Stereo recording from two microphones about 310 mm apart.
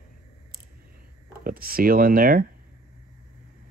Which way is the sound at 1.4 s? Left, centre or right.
Right.